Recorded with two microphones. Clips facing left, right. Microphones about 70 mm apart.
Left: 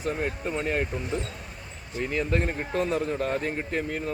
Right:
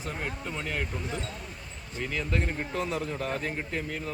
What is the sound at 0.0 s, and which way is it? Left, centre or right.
Speech, left.